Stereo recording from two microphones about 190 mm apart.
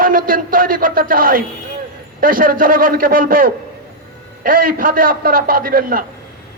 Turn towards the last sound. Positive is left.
turn(degrees=-50)  # may be behind; listen again after turning